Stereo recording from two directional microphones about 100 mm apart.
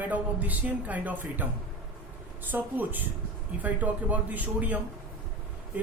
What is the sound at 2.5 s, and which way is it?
Speech, 15° right (ahead or behind).